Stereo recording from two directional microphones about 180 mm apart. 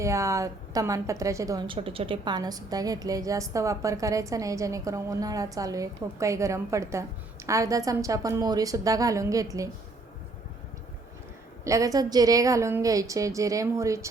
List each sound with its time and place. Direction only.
0.0 s a woman's voice: 15° right (ahead or behind)
11.6 s a woman's voice: 20° right (ahead or behind)